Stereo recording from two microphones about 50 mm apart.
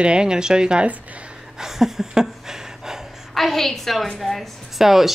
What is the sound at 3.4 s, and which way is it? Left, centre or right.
A woman's voice, centre.